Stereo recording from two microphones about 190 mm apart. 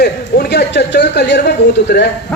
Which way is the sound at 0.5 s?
60° left (ahead or behind).